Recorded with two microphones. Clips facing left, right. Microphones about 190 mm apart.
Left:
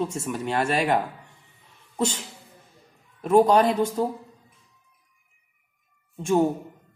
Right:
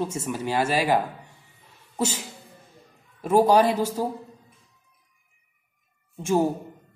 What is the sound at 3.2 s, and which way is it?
Speech, 5° right (ahead or behind).